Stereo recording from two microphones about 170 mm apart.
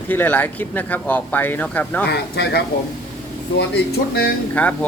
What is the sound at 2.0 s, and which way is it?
A man's voice, 70° left (ahead or behind).